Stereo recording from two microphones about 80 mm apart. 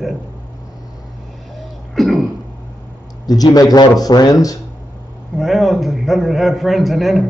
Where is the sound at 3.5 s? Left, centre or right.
Left.